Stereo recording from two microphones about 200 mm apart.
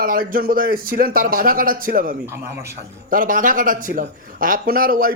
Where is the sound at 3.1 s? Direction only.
45° right (ahead or behind).